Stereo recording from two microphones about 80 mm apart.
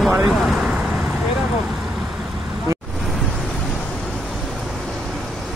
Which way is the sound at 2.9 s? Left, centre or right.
Centre.